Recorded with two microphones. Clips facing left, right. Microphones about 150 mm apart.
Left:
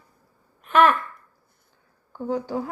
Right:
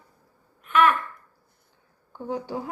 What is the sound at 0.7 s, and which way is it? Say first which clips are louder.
Speech: left 3 dB; 35° left (ahead or behind).